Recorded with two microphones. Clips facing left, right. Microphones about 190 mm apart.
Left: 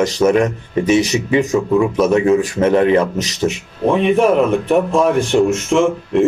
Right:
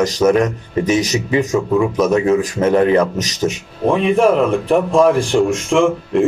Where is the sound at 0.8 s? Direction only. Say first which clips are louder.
Left 3 dB; 30° left (ahead or behind).